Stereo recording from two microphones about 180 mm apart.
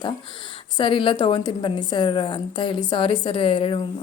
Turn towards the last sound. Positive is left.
turn(degrees=30)  # may be behind; listen again after turning